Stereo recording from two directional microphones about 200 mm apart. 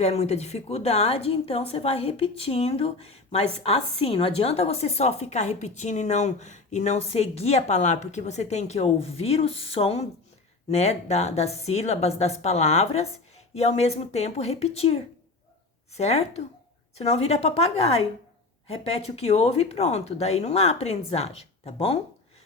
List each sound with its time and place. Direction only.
0.0 s a woman's voice: 35° left (ahead or behind)